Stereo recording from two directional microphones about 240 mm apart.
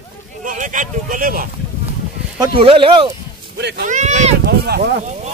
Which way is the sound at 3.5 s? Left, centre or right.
Right.